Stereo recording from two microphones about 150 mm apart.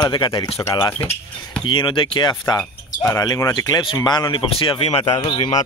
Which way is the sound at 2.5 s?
20° left (ahead or behind).